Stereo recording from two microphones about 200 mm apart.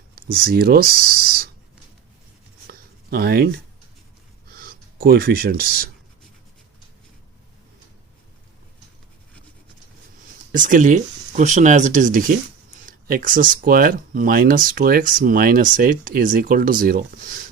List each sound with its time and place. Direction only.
0.2 s speech: 45° right (ahead or behind)
2.6 s a sound: 50° right (ahead or behind)
4.4 s gasp: 45° right (ahead or behind)
10.5 s speech: 40° right (ahead or behind)